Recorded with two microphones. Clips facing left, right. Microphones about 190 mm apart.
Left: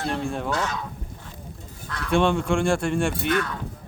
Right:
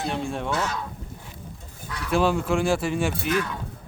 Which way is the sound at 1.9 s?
5° right (ahead or behind).